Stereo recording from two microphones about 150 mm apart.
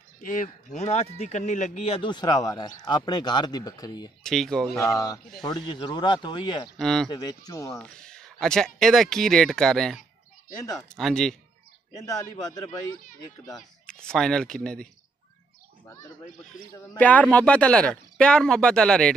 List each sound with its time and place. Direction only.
0.2 s speech: 60° left (ahead or behind); by 4.1 s 25° left (ahead or behind)
4.2 s speech: 5° left (ahead or behind)
4.7 s speech: 20° left (ahead or behind)
6.8 s speech: 5° left (ahead or behind)
7.1 s speech: 25° left (ahead or behind)
7.8 s speech: 5° left (ahead or behind)
11.0 s speech: centre (ahead or behind)
12.4 s speech: 25° left (ahead or behind)
13.6 s speech: 5° left (ahead or behind)
16.9 s speech: 10° left (ahead or behind)